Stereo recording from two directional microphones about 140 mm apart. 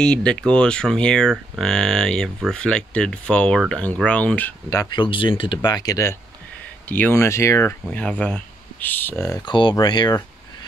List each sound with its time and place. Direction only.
0.0 s speech: 5° left (ahead or behind)
4.6 s speech: 25° left (ahead or behind)
9.5 s speech: 35° left (ahead or behind)